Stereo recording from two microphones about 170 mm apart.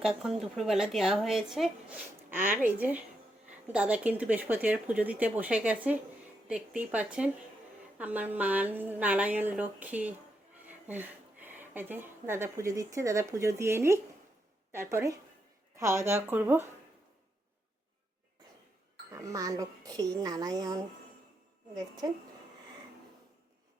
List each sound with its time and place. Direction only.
0.0 s a woman's voice: 5° right (ahead or behind)
19.1 s a woman's voice: 20° right (ahead or behind)